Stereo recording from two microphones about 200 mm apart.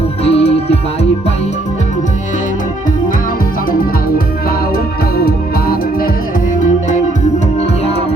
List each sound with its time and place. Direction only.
0.3 s music: 30° left (ahead or behind)
5.1 s music: 50° left (ahead or behind)